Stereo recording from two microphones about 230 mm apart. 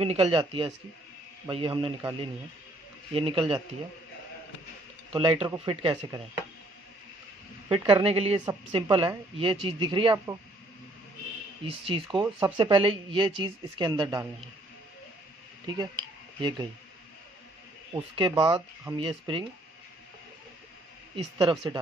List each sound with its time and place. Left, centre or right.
0.0 s speech: right
5.1 s speech: right
7.6 s speech: right
11.8 s speech: right
16.3 s speech: centre
17.9 s speech: centre
21.4 s speech: right